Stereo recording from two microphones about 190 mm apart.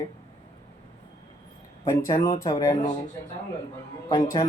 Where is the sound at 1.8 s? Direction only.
20° left (ahead or behind).